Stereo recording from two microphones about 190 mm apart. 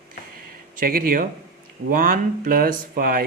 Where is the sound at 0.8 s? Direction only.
50° right (ahead or behind).